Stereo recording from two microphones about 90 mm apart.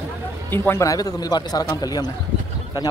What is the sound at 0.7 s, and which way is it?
A man's voice, 40° left (ahead or behind).